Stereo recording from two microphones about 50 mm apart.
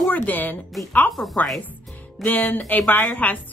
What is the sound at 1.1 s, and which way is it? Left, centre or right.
Speech, centre.